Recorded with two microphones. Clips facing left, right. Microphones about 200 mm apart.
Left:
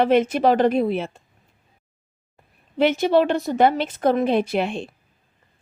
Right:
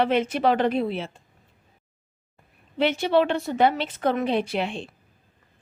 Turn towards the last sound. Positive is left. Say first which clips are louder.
# left 4 dB
turn(degrees=45)  # may be behind; listen again after turning